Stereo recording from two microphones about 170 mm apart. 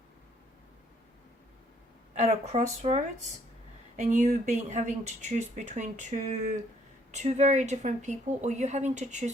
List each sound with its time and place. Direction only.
2.1 s speech: 40° right (ahead or behind)